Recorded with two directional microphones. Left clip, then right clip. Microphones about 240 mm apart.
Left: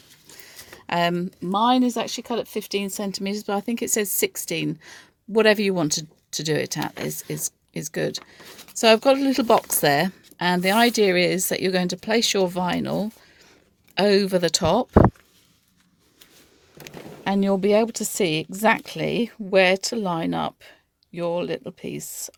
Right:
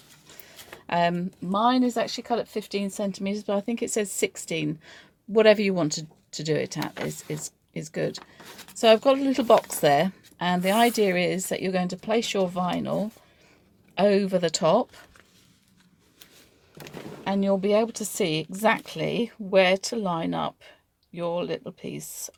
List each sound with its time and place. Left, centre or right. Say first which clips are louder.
0.9 s speech: left 1 dB; left
16.8 s speech: left 3 dB; left